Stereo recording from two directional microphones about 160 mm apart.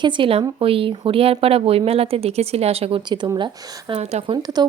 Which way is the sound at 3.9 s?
40° right (ahead or behind).